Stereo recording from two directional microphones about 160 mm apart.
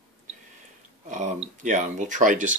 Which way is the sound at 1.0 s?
50° right (ahead or behind).